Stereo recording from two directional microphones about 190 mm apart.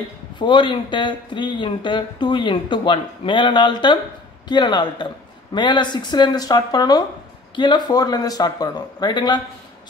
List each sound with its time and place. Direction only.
0.4 s speech: 25° left (ahead or behind)